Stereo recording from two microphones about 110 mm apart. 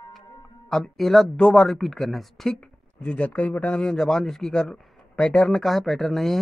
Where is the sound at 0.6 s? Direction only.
5° left (ahead or behind).